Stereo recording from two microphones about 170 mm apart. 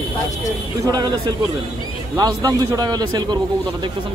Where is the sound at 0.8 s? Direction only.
25° right (ahead or behind).